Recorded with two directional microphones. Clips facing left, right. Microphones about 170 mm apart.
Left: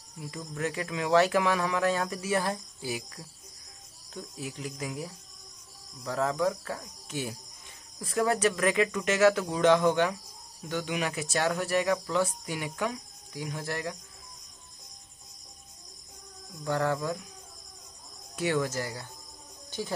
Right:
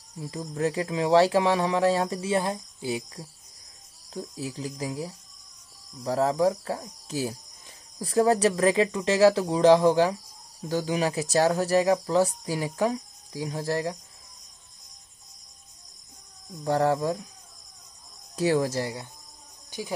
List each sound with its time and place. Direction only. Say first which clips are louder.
0.2 s speech: right 6 dB; 30° right (ahead or behind)
16.6 s speech: right 5 dB; 30° right (ahead or behind)
18.3 s speech: right 5 dB; 35° right (ahead or behind)